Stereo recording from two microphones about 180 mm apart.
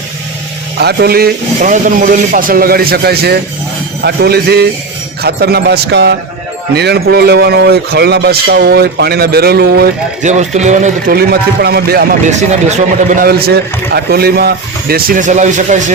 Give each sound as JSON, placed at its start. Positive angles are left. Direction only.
{"t": 0.8, "sound": "speech", "side_deg": -65}
{"t": 10.2, "sound": "a man's voice", "side_deg": -40}
{"t": 12.2, "sound": "speech", "side_deg": -40}